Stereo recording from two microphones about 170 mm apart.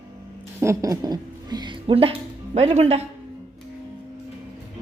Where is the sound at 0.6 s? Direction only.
20° right (ahead or behind); by 3.0 s 35° right (ahead or behind).